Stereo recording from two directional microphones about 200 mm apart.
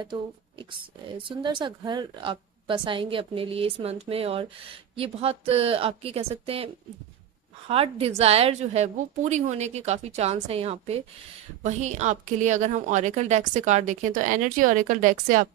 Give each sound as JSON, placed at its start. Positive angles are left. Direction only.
{"t": 0.0, "sound": "a woman's voice", "side_deg": -25}